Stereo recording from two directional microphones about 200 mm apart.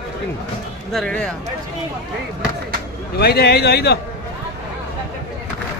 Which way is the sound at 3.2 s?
55° left (ahead or behind).